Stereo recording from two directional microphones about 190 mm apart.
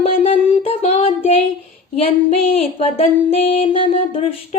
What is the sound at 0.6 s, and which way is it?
Child singing, 30° left (ahead or behind).